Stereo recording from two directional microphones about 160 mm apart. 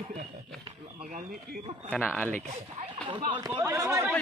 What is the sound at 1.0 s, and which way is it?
Speech, 55° right (ahead or behind).